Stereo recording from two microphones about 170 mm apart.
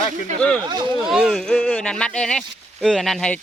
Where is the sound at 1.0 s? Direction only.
Centre (ahead or behind).